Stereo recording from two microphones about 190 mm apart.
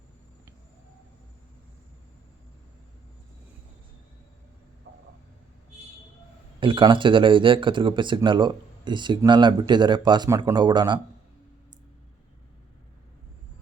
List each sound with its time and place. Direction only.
6.6 s speech: 25° right (ahead or behind)